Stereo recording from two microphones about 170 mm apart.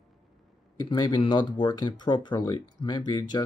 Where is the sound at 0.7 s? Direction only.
25° left (ahead or behind).